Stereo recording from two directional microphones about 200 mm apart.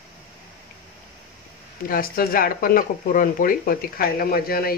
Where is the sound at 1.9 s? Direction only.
45° left (ahead or behind).